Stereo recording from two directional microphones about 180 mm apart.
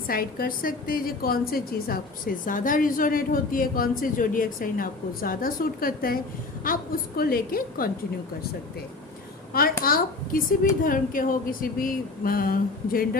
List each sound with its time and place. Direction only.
0.1 s a woman's voice: 55° left (ahead or behind)
9.5 s a woman's voice: 55° left (ahead or behind)
9.8 s a sound: 50° left (ahead or behind)
10.8 s a woman's voice: 50° left (ahead or behind)